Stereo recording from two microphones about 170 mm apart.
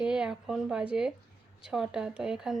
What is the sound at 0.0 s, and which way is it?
A woman's voice, 5° right (ahead or behind).